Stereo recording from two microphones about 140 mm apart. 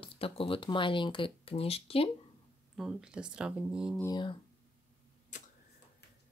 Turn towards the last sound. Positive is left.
turn(degrees=65)  # may be behind; listen again after turning